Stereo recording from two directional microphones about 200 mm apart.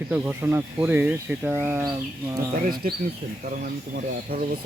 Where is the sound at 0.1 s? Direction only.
10° right (ahead or behind).